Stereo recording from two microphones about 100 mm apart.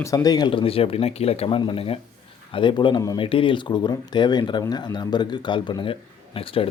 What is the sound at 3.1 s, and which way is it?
Speech, 60° left (ahead or behind).